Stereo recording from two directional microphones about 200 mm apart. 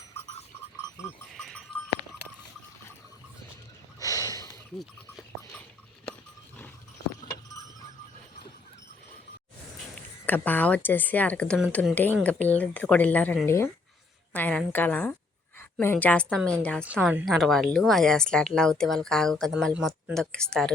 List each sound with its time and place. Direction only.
1.3 s livestock: centre (ahead or behind)
4.0 s snort: 20° left (ahead or behind)
10.2 s speech: 10° left (ahead or behind)
16.9 s a woman's voice: 5° right (ahead or behind)